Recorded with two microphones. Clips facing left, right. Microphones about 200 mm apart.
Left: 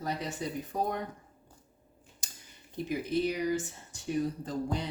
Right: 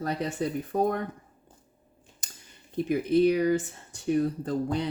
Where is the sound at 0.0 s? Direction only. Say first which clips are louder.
Right 6 dB; 60° right (ahead or behind).